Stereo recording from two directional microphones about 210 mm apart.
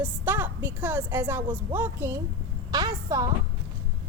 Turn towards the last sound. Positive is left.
turn(degrees=-15)  # may be behind; listen again after turning